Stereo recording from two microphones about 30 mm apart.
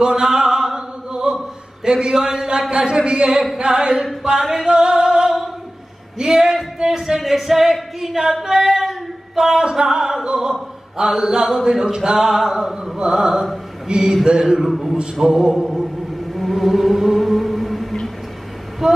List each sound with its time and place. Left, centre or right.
0.1 s a sound: centre
1.9 s mantra: right
4.2 s a sound: right
6.1 s singing: centre
6.8 s mantra: right
7.2 s singing: centre
8.5 s singing: centre
9.4 s mantra: right
13.8 s a sound: right
14.4 s singing: centre
15.2 s mantra: right
15.8 s music: centre
18.8 s speech: centre